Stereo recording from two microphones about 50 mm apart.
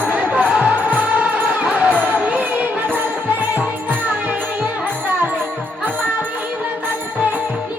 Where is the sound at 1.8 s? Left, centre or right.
Right.